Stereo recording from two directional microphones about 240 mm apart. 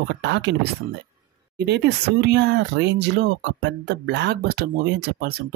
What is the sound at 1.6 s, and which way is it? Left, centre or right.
Speech, right.